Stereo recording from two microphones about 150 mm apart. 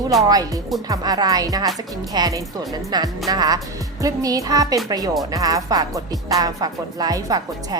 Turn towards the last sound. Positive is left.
turn(degrees=-25)  # may be behind; listen again after turning